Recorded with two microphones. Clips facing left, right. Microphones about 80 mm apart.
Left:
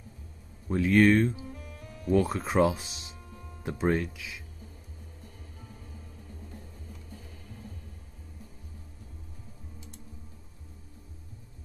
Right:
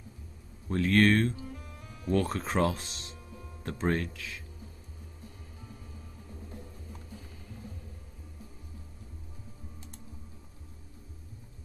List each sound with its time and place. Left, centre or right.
0.7 s speech: centre